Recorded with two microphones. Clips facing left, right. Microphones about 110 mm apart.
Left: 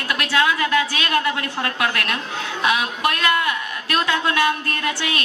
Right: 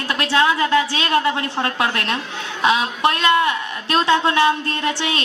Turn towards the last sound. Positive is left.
turn(degrees=-25)  # may be behind; listen again after turning